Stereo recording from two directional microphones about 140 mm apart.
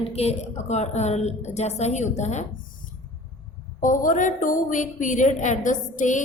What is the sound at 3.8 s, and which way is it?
A woman's voice, 70° left (ahead or behind).